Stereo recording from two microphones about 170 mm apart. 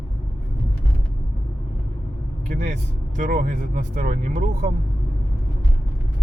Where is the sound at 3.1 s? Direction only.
50° right (ahead or behind).